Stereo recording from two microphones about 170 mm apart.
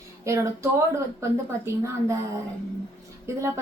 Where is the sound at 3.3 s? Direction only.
15° right (ahead or behind).